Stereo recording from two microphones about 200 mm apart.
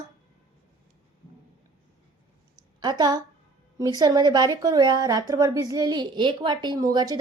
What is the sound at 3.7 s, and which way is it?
A woman's voice, 20° right (ahead or behind).